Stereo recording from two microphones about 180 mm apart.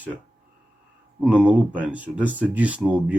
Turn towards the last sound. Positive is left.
turn(degrees=-5)  # may be behind; listen again after turning